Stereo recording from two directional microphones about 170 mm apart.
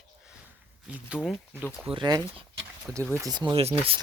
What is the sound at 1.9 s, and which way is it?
Speech, 25° right (ahead or behind).